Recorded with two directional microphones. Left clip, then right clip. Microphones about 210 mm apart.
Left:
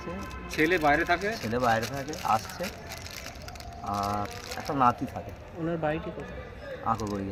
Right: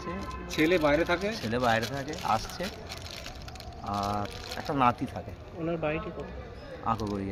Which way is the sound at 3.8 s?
10° right (ahead or behind).